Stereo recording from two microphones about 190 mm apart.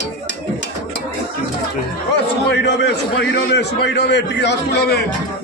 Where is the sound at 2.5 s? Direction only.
60° left (ahead or behind).